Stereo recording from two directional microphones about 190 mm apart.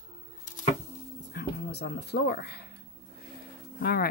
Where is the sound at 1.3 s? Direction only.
60° left (ahead or behind).